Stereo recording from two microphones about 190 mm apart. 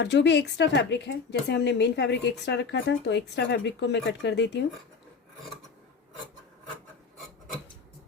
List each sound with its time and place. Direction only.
0.0 s speech: 65° left (ahead or behind)